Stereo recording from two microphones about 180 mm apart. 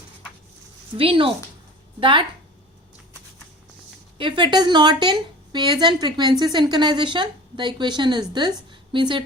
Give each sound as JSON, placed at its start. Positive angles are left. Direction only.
{"t": 0.9, "sound": "a woman's voice", "side_deg": -30}
{"t": 4.2, "sound": "a woman's voice", "side_deg": -25}